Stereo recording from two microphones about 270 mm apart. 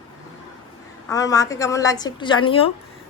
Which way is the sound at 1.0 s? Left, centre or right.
Centre.